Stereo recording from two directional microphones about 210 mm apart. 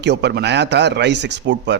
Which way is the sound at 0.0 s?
55° right (ahead or behind).